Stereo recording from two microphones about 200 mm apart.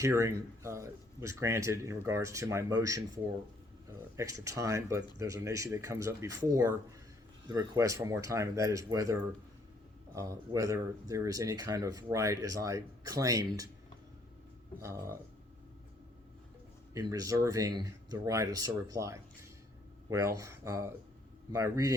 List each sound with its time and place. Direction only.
0.0 s speech: 15° right (ahead or behind)
4.2 s speech: 15° right (ahead or behind)
10.2 s speech: 15° right (ahead or behind)
14.8 s speech: 15° right (ahead or behind)
16.9 s speech: 15° right (ahead or behind)